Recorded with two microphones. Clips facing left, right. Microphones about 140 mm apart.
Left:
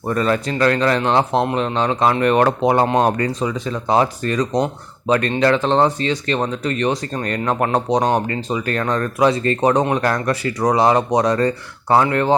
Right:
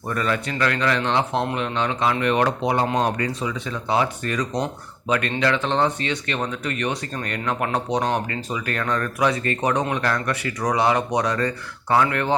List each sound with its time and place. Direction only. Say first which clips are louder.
0.1 s speech: left 6 dB; 35° left (ahead or behind); by 3.2 s 50° left (ahead or behind)
3.2 s speech: left 5 dB; 40° left (ahead or behind)